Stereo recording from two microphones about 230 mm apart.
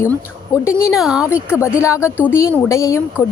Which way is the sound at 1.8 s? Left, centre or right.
Centre.